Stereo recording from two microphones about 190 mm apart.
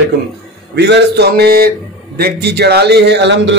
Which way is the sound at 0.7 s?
60° right (ahead or behind).